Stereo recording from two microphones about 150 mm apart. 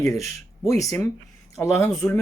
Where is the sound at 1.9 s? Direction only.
5° left (ahead or behind).